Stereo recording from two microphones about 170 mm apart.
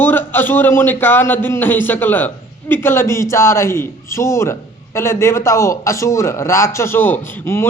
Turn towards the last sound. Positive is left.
turn(degrees=15)  # may be behind; listen again after turning